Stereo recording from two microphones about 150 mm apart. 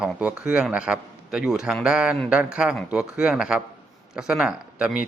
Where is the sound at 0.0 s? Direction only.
5° right (ahead or behind).